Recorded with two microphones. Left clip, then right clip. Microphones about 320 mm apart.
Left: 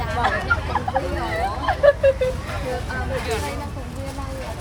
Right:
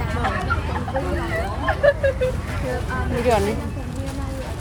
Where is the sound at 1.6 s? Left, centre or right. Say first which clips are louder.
Left 2 dB; left.